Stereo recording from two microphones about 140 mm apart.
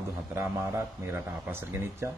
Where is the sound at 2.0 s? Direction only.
20° right (ahead or behind).